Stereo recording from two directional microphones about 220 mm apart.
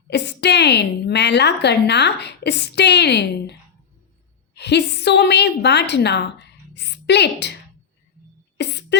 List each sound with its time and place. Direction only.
0.1 s a woman's voice: 50° left (ahead or behind)
4.5 s a woman's voice: 50° left (ahead or behind)
8.5 s a sound: 50° left (ahead or behind)